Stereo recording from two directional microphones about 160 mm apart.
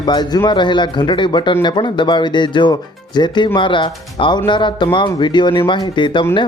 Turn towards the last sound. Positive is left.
turn(degrees=30)  # may be behind; listen again after turning